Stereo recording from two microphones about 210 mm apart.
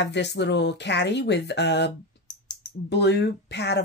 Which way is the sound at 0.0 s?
55° left (ahead or behind).